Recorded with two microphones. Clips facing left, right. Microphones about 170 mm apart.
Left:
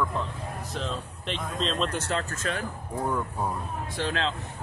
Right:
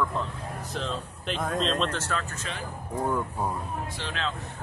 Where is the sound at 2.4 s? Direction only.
50° left (ahead or behind).